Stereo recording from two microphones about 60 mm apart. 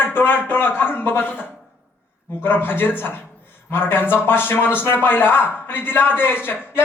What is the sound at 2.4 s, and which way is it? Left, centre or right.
A man's voice, left.